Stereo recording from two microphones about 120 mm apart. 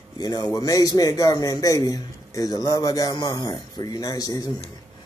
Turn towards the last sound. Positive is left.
turn(degrees=30)  # may be behind; listen again after turning